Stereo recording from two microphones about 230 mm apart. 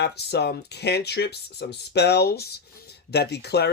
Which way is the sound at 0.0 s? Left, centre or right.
Left.